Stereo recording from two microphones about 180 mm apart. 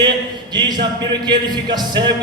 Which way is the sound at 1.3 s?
25° right (ahead or behind).